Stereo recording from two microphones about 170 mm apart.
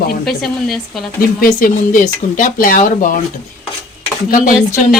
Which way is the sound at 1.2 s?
55° left (ahead or behind).